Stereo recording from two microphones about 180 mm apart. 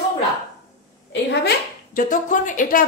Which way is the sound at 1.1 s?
70° left (ahead or behind).